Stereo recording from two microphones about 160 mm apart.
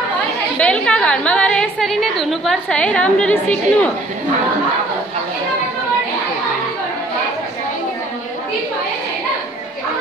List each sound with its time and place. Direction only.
0.6 s a woman's voice: 5° left (ahead or behind)